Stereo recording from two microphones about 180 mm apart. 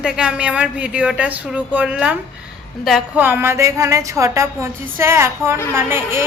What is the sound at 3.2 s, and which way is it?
A woman's voice, 10° right (ahead or behind).